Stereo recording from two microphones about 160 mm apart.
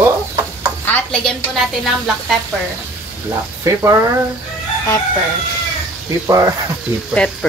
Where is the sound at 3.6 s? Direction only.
20° right (ahead or behind).